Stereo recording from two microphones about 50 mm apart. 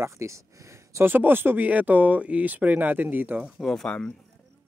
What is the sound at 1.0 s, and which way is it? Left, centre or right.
Speech, right.